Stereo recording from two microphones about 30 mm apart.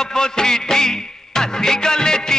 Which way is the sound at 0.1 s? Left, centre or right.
Left.